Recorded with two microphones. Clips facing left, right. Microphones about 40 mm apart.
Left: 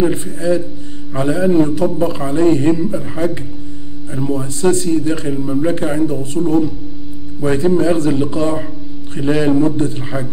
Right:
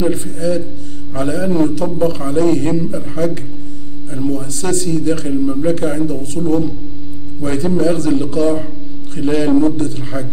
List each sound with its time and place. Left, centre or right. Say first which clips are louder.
0.1 s a man's voice: left 1 dB; left